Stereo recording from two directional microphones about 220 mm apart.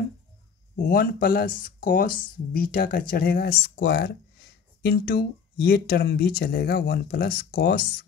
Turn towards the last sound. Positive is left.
turn(degrees=45)  # may be behind; listen again after turning